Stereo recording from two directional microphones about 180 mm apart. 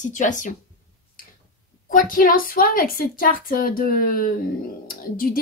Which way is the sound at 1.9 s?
50° left (ahead or behind).